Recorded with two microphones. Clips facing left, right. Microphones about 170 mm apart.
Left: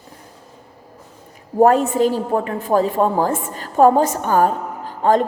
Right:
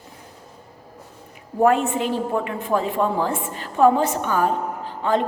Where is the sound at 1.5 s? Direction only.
40° left (ahead or behind).